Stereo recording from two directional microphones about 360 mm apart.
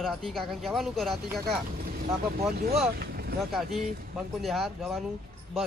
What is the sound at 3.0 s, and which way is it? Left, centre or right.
Boat, right.